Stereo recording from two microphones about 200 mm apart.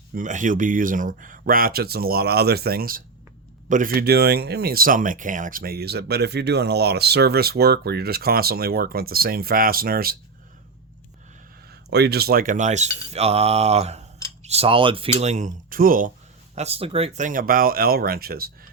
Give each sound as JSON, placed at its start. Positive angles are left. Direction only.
{"t": 0.1, "sound": "speech", "side_deg": -40}
{"t": 11.9, "sound": "speech", "side_deg": -55}
{"t": 16.6, "sound": "speech", "side_deg": -30}